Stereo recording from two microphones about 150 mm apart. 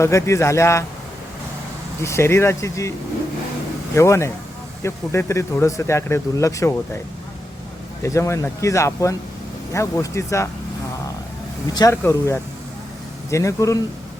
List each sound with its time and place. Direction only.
0.0 s speech: 20° left (ahead or behind)
2.0 s speech: 20° left (ahead or behind)
3.9 s speech: 20° left (ahead or behind)
8.0 s speech: 20° left (ahead or behind)
11.7 s speech: 20° left (ahead or behind)